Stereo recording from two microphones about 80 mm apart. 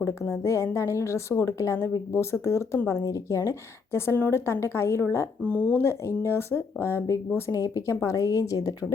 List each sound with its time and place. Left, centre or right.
0.0 s a woman's voice: left
3.9 s a woman's voice: left
5.5 s speech: centre
5.8 s a woman's voice: left